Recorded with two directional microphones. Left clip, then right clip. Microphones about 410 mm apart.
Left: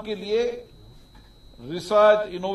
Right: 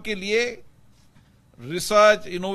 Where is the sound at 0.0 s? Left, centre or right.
Right.